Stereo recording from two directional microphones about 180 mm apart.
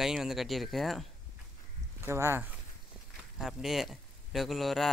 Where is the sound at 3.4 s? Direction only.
Centre (ahead or behind).